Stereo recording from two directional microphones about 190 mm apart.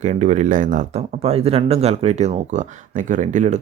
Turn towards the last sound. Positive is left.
turn(degrees=-40)  # may be behind; listen again after turning